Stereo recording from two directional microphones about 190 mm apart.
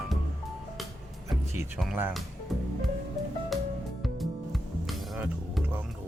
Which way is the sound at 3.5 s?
Centre (ahead or behind).